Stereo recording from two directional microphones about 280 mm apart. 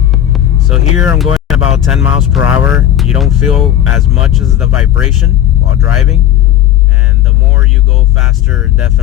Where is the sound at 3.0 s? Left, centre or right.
Centre.